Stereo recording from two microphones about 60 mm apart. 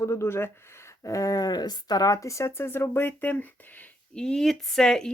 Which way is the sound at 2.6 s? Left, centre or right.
Left.